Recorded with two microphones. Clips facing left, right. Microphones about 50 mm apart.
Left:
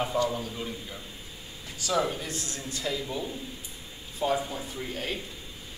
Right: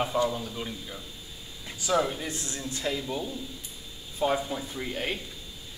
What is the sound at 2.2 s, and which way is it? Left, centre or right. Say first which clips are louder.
Speech: right 1 dB; right.